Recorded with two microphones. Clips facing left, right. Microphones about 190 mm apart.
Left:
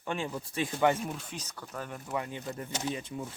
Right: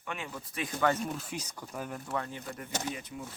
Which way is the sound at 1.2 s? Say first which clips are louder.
Right 3 dB; 10° right (ahead or behind).